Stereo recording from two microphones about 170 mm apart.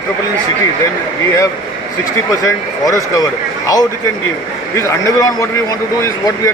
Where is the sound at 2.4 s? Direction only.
20° left (ahead or behind).